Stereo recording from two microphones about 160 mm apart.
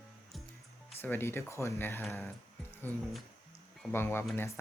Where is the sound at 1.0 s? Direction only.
15° left (ahead or behind).